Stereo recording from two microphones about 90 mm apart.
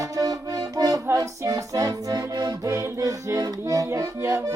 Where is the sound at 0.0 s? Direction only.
45° right (ahead or behind).